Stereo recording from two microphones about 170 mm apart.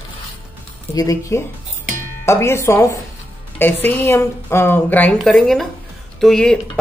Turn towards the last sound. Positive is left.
turn(degrees=5)  # may be behind; listen again after turning